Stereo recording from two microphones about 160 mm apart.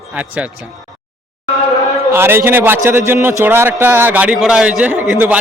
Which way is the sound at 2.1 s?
15° right (ahead or behind).